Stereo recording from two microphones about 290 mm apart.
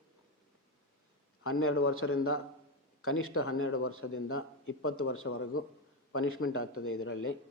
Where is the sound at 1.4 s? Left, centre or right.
Left.